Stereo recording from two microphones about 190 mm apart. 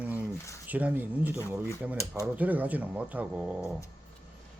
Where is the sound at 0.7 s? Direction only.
10° right (ahead or behind).